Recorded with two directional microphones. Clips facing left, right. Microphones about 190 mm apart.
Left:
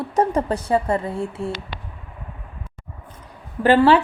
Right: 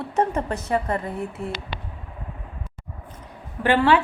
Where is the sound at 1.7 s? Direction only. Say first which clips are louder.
Right 1 dB; 20° right (ahead or behind).